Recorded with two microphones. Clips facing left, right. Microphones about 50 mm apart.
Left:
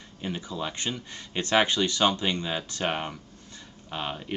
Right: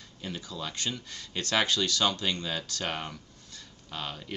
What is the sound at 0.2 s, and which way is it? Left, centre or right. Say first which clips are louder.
Speech: left 5 dB; left.